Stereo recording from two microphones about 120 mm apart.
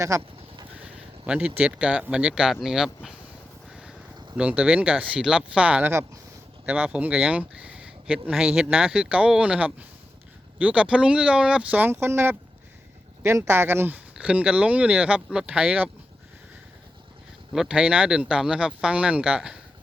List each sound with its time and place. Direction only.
0.2 s a sound: 45° right (ahead or behind)
0.8 s speech: 10° right (ahead or behind)
3.7 s vehicle: 5° right (ahead or behind)
4.4 s speech: 10° right (ahead or behind)
13.5 s speech: 20° right (ahead or behind)
17.5 s speech: 5° right (ahead or behind)